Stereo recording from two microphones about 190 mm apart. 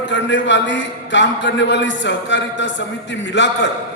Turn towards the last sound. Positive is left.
turn(degrees=70)  # may be behind; listen again after turning